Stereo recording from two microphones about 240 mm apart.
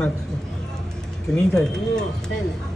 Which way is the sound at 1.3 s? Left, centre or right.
Centre.